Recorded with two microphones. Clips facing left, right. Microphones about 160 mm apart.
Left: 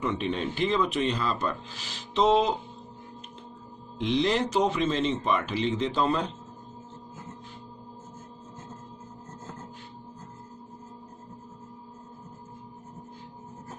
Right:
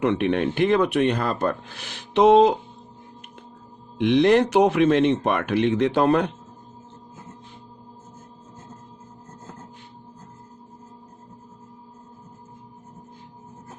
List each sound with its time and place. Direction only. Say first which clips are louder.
0.0 s speech: right 8 dB; 65° right (ahead or behind)
4.0 s speech: right 8 dB; 60° right (ahead or behind)